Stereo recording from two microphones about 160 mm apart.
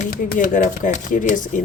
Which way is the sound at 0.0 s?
55° left (ahead or behind).